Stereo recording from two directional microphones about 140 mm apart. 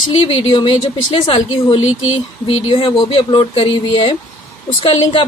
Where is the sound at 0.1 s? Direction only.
40° left (ahead or behind).